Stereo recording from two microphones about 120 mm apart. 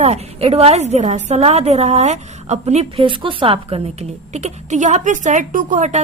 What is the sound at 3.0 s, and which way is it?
A woman's voice, 45° right (ahead or behind).